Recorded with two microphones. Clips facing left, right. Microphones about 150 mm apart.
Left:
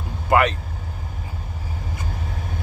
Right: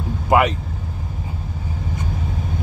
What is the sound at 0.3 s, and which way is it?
Speech, 15° right (ahead or behind).